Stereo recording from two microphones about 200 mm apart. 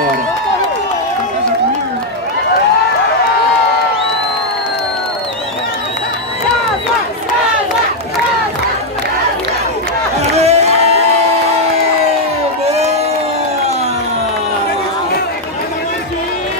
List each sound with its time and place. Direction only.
10.3 s crowd: 30° right (ahead or behind)
12.6 s crowd: 30° right (ahead or behind)